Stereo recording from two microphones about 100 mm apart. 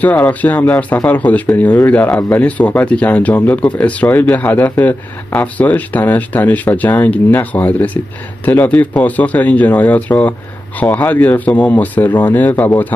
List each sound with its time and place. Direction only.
0.0 s speech: 15° left (ahead or behind)